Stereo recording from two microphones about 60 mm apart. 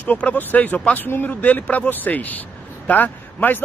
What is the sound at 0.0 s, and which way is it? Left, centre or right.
A man's voice, left.